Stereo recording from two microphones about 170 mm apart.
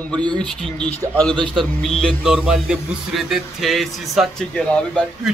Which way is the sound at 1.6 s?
Centre (ahead or behind).